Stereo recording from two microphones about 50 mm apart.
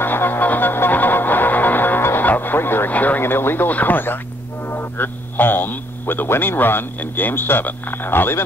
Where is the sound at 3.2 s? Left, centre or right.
Left.